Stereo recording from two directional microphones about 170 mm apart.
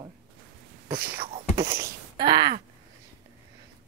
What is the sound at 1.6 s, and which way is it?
Wail, 15° right (ahead or behind).